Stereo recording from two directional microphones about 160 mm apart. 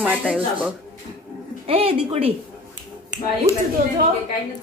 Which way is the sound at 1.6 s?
35° right (ahead or behind).